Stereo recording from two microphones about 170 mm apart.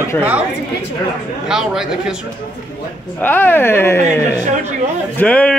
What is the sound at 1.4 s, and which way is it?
Speech, 5° right (ahead or behind).